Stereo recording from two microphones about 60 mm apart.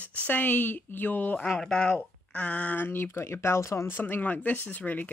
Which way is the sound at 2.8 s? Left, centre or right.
Left.